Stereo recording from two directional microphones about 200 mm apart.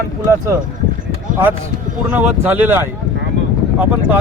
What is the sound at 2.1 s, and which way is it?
Speech, 10° right (ahead or behind).